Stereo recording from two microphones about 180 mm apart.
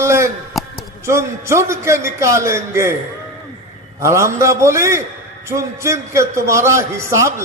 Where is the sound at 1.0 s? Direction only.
15° right (ahead or behind).